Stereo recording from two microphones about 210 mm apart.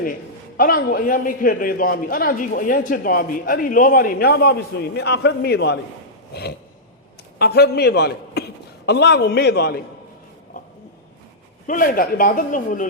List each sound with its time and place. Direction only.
0.0 s a man's voice: 40° left (ahead or behind)
11.6 s a man's voice: 40° left (ahead or behind)